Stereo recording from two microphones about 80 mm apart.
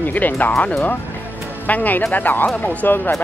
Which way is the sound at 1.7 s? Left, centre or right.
Left.